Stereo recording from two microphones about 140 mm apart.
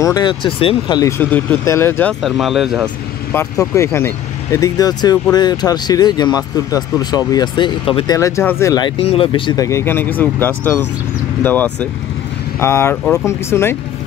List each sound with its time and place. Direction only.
0.0 s speech: 30° left (ahead or behind)
0.9 s speech: 20° left (ahead or behind)
2.2 s speech: centre (ahead or behind)
3.3 s speech: 20° left (ahead or behind); by 8.2 s 35° left (ahead or behind)
8.2 s speech: 20° left (ahead or behind)
8.7 s speech: 40° left (ahead or behind)
9.7 s speech: 20° left (ahead or behind)